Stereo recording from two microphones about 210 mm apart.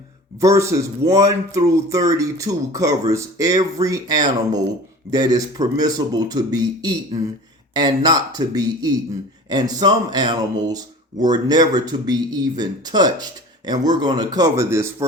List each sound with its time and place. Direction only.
0.3 s speech: 15° right (ahead or behind)